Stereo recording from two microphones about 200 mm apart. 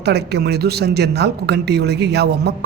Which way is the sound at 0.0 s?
55° right (ahead or behind).